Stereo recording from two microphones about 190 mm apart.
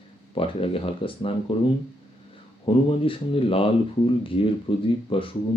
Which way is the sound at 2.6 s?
30° left (ahead or behind).